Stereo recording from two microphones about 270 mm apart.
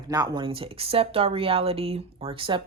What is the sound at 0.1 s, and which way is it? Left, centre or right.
Speech, centre.